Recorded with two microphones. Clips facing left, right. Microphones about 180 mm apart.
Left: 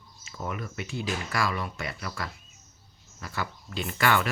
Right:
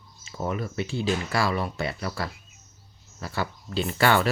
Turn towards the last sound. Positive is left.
turn(degrees=-30)  # may be behind; listen again after turning